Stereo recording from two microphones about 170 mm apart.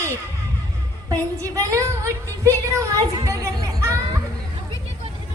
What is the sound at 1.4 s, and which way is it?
A woman's voice, 20° right (ahead or behind).